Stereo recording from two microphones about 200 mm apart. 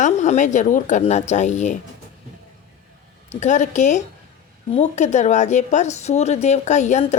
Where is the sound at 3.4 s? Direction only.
35° left (ahead or behind).